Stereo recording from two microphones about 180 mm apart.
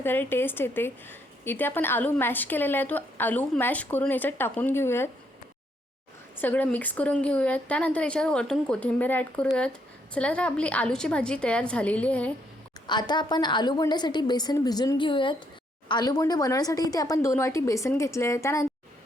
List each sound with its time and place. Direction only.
0.0 s a woman's voice: 10° left (ahead or behind)
6.3 s a woman's voice: 10° left (ahead or behind)
12.9 s a woman's voice: 25° left (ahead or behind)